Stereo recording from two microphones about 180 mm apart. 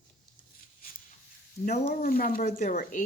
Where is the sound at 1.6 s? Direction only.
50° left (ahead or behind).